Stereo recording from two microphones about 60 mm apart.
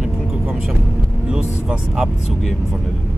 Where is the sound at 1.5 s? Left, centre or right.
Centre.